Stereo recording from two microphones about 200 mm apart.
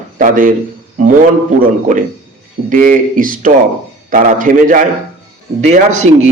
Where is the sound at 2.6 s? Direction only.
40° right (ahead or behind).